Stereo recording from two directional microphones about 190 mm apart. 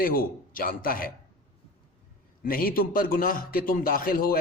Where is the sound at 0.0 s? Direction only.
50° left (ahead or behind).